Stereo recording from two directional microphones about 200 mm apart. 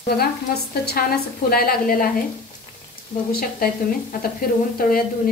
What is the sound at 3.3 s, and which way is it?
A woman's voice, 50° left (ahead or behind).